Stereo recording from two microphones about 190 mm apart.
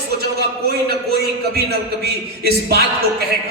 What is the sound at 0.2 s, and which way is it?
A man's voice, 55° right (ahead or behind).